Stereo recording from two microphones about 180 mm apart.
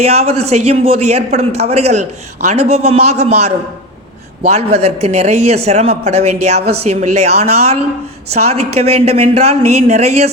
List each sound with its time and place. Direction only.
0.0 s a man's voice: 35° right (ahead or behind)